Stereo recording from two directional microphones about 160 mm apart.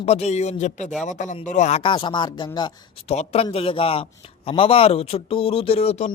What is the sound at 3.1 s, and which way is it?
A man's voice, 40° left (ahead or behind).